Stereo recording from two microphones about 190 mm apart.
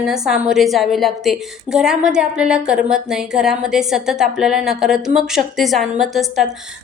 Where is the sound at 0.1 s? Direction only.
5° right (ahead or behind).